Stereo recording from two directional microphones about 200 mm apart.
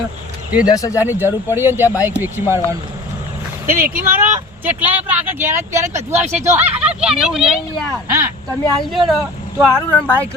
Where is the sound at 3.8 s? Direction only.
10° right (ahead or behind).